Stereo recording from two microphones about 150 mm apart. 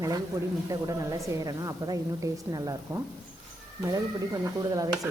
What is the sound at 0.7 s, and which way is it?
A woman's voice, 20° right (ahead or behind).